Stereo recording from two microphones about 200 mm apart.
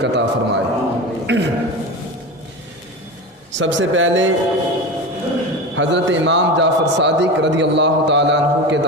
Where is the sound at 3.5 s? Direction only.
70° right (ahead or behind).